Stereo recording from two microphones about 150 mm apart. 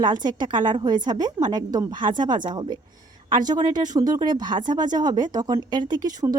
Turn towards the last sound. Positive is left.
turn(degrees=-25)  # may be behind; listen again after turning